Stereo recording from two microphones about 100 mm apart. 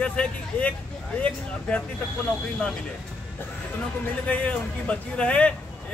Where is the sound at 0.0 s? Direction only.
10° left (ahead or behind).